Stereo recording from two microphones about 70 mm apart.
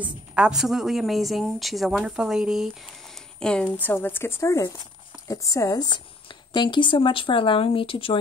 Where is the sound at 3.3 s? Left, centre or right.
Centre.